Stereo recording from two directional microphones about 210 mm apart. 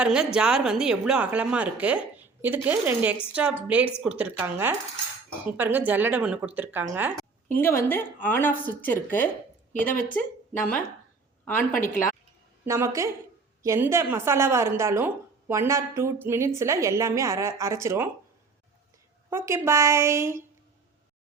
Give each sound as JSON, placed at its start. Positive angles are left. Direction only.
{"t": 0.0, "sound": "a woman's voice", "side_deg": -5}
{"t": 7.5, "sound": "speech", "side_deg": 10}
{"t": 9.8, "sound": "a woman's voice", "side_deg": 40}
{"t": 10.2, "sound": "a woman's voice", "side_deg": 10}
{"t": 12.6, "sound": "speech", "side_deg": -15}
{"t": 19.3, "sound": "speech", "side_deg": -10}